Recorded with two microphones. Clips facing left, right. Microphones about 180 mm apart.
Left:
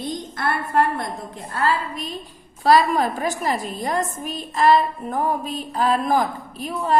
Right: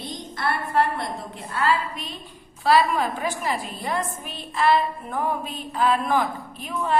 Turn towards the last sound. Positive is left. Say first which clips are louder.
# left 3 dB
turn(degrees=35)  # may be behind; listen again after turning